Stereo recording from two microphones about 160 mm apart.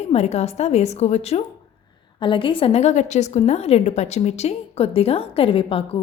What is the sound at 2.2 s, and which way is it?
A woman's voice, 30° left (ahead or behind).